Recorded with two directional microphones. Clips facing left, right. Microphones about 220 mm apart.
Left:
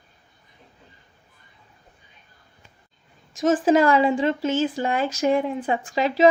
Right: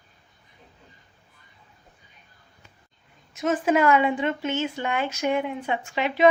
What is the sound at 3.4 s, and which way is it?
Speech, 30° left (ahead or behind).